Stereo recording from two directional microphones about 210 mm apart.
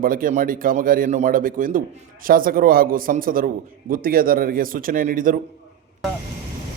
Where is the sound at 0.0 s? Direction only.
40° right (ahead or behind).